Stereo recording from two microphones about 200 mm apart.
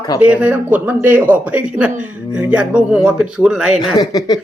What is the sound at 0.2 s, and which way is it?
A man's voice, 5° right (ahead or behind).